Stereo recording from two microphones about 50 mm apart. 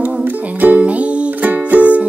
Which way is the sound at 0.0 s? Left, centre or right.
Right.